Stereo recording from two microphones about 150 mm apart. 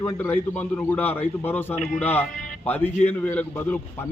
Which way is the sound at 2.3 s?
65° left (ahead or behind).